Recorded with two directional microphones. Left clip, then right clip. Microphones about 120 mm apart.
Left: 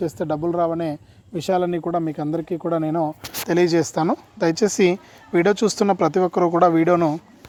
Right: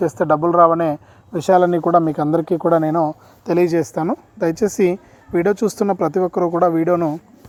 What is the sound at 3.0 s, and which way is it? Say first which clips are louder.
Speech: right 3 dB; 15° right (ahead or behind).